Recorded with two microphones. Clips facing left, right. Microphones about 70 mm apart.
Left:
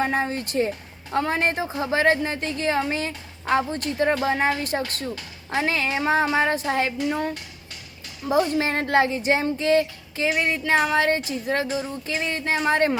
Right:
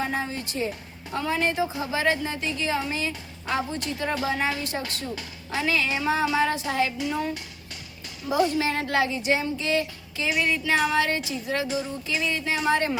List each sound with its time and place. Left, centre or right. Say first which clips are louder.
0.0 s a woman's voice: left 5 dB; left
8.3 s speech: left 2 dB; left